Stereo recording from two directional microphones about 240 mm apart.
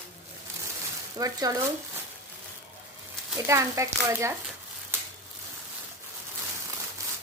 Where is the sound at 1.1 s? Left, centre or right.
Centre.